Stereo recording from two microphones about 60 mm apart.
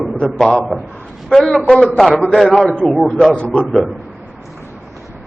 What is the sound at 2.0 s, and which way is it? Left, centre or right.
A man's voice, centre.